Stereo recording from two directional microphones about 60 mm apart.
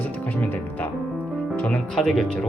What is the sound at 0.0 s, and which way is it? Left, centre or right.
Music, left.